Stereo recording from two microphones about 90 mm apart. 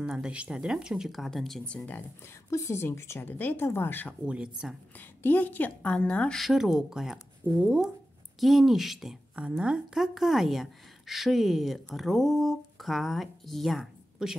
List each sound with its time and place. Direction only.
0.0 s a woman's voice: 10° right (ahead or behind)
1.7 s a woman's voice: 15° left (ahead or behind)
2.5 s speech: 30° left (ahead or behind)
4.3 s speech: 5° right (ahead or behind)
5.2 s a woman's voice: 20° left (ahead or behind)
6.3 s a woman's voice: centre (ahead or behind)